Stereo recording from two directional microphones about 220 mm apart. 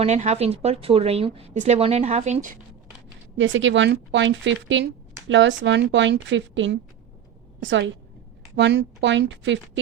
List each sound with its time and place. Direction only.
0.0 s a woman's voice: 30° right (ahead or behind)
3.3 s speech: 60° right (ahead or behind)